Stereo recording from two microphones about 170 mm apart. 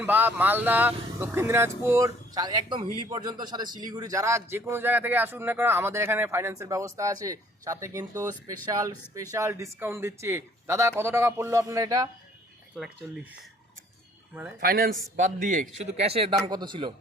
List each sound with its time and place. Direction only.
0.0 s a man's voice: 10° right (ahead or behind)
13.0 s speech: 5° right (ahead or behind)
14.6 s a man's voice: 60° right (ahead or behind); by 16.3 s 35° right (ahead or behind)
16.5 s a man's voice: 25° right (ahead or behind)